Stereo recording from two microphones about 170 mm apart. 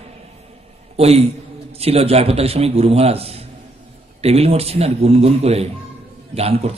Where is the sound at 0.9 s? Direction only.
35° right (ahead or behind).